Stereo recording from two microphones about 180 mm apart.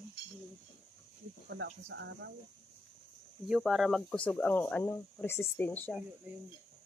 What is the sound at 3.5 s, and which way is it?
Speech, centre (ahead or behind).